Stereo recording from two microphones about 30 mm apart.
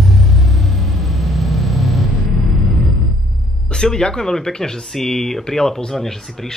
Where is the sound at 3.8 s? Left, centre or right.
Left.